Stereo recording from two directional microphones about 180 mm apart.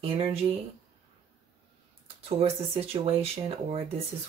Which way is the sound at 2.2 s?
35° right (ahead or behind).